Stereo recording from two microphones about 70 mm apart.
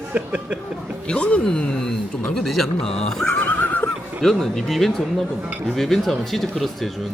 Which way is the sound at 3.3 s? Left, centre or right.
Left.